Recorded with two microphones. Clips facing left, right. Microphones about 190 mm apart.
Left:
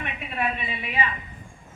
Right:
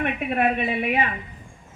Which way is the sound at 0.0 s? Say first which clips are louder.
Right 7 dB; 55° right (ahead or behind).